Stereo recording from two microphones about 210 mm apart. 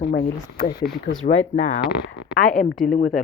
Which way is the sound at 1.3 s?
35° left (ahead or behind).